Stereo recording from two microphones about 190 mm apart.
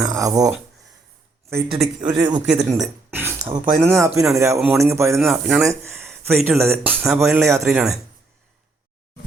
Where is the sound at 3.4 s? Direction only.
40° right (ahead or behind).